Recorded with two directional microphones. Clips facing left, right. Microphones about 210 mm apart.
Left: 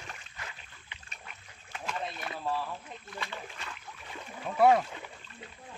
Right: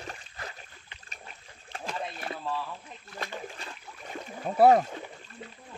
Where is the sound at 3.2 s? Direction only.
40° right (ahead or behind).